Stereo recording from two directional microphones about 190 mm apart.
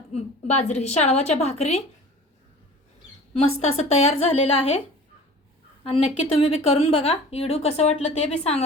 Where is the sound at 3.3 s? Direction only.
35° left (ahead or behind).